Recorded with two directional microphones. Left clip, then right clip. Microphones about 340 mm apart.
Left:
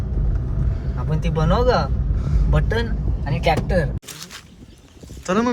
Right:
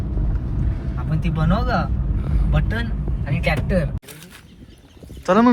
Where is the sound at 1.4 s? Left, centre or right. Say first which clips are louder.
Left 5 dB; left.